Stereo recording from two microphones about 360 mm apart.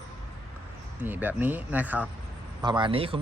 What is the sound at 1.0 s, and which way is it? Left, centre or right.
Speech, centre.